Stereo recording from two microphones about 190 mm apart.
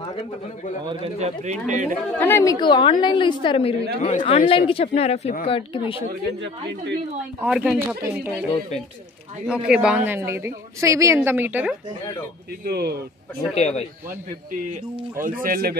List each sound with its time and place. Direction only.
1.0 s speech: 35° right (ahead or behind)
2.1 s a woman's voice: 10° left (ahead or behind)
2.6 s a woman's voice: 25° left (ahead or behind); by 4.5 s 40° left (ahead or behind)
4.5 s a woman's voice: 30° left (ahead or behind)
7.4 s speech: 5° right (ahead or behind)
9.5 s a woman's voice: 5° right (ahead or behind)
12.6 s speech: 60° right (ahead or behind)
13.6 s speech: 35° left (ahead or behind)
15.4 s speech: 50° right (ahead or behind)